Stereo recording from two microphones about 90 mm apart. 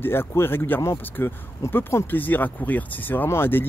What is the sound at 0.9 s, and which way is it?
Speech, 35° left (ahead or behind).